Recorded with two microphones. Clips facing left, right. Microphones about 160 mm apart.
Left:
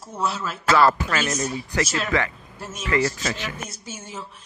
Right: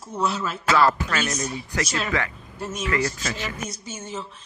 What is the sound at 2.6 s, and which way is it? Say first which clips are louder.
Speech: left 2 dB; centre (ahead or behind).